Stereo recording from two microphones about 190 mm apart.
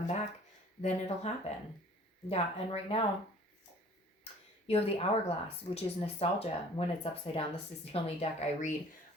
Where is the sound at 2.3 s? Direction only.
30° left (ahead or behind).